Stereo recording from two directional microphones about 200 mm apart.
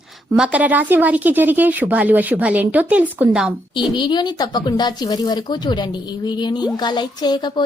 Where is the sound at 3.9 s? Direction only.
20° left (ahead or behind).